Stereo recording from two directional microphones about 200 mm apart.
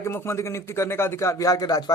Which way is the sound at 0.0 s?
15° left (ahead or behind).